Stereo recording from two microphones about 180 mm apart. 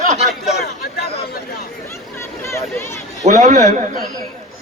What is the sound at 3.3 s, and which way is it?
Speech, 45° right (ahead or behind).